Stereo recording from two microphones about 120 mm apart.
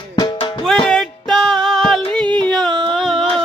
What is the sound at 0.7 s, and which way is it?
Music, centre (ahead or behind).